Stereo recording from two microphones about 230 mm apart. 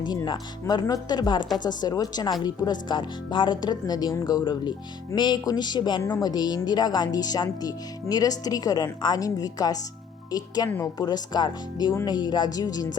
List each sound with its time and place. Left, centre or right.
0.0 s a woman's voice: centre